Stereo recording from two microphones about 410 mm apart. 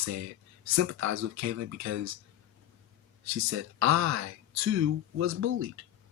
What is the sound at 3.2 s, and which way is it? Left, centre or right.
Speech, right.